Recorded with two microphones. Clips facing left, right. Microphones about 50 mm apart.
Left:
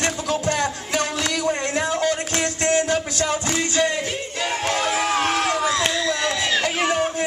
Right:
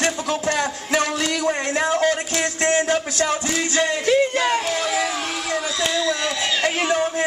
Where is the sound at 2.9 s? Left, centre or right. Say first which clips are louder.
Right 1 dB; centre.